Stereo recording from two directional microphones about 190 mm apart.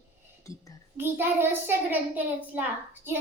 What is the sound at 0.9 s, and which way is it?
Child singing, 10° right (ahead or behind).